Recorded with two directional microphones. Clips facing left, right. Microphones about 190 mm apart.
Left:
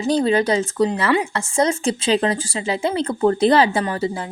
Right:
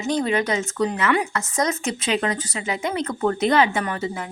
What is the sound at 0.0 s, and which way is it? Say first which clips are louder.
Speech: left 4 dB; 30° left (ahead or behind).